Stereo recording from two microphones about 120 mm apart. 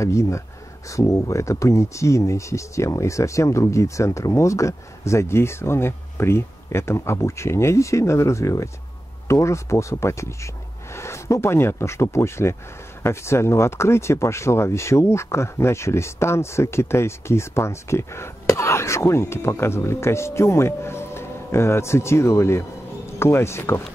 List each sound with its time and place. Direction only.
0.0 s speech: 25° left (ahead or behind)